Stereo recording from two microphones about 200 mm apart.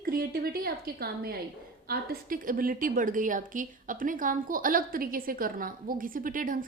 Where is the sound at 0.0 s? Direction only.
50° right (ahead or behind).